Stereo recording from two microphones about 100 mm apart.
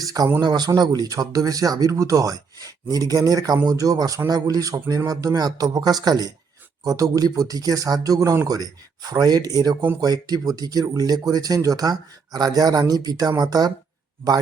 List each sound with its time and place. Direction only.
0.0 s a man's voice: 40° right (ahead or behind)